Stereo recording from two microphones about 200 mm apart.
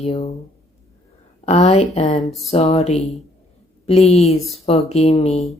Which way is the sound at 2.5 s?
30° left (ahead or behind).